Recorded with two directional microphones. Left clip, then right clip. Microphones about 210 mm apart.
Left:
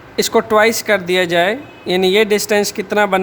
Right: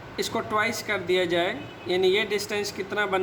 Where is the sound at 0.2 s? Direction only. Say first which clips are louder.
Left 13 dB; 45° left (ahead or behind).